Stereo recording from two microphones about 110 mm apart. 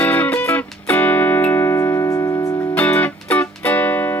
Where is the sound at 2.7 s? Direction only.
15° left (ahead or behind).